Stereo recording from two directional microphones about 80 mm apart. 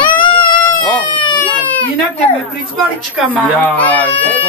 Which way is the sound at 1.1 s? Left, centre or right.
Left.